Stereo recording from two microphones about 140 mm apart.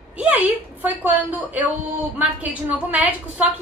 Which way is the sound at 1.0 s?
10° right (ahead or behind).